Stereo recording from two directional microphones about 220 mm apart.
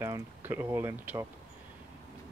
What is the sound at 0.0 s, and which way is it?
Speech, 10° right (ahead or behind).